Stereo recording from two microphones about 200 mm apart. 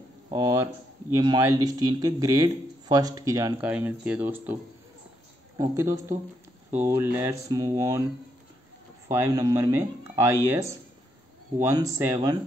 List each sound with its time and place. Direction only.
0.3 s speech: 15° right (ahead or behind)
5.6 s speech: 15° right (ahead or behind)
9.1 s speech: 15° right (ahead or behind)